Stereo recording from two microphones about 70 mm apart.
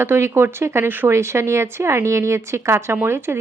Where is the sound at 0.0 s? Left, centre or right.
Right.